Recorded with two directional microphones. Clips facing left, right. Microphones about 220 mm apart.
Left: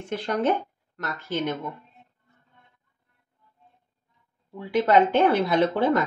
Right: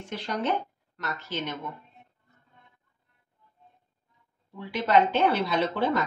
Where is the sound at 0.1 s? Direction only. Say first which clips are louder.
Left 5 dB; 50° left (ahead or behind).